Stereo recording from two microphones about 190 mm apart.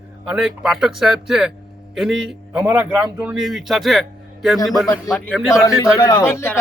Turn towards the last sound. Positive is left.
turn(degrees=10)  # may be behind; listen again after turning